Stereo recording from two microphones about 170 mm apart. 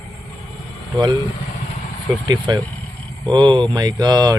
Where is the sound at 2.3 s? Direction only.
25° right (ahead or behind).